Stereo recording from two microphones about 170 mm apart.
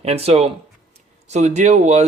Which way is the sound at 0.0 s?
35° right (ahead or behind).